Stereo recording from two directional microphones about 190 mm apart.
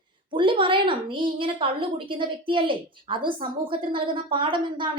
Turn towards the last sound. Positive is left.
turn(degrees=-25)  # may be behind; listen again after turning